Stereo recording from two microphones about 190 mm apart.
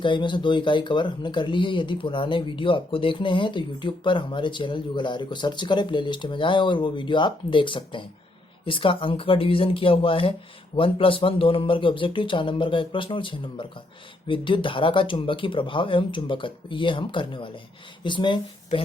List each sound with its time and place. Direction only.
0.0 s speech: 25° left (ahead or behind)